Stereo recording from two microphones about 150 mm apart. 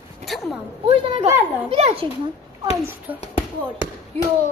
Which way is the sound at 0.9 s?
40° right (ahead or behind).